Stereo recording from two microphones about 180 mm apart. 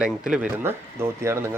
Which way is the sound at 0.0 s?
5° right (ahead or behind).